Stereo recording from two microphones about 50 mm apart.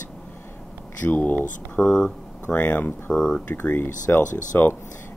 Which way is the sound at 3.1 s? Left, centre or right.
Centre.